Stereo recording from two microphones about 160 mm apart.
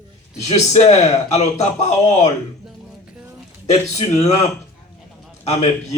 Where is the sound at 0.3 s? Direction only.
45° left (ahead or behind).